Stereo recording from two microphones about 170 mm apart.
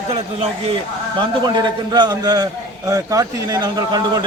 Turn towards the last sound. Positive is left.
turn(degrees=-20)  # may be behind; listen again after turning